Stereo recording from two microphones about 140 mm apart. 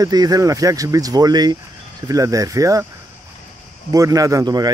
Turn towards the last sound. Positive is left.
turn(degrees=-30)  # may be behind; listen again after turning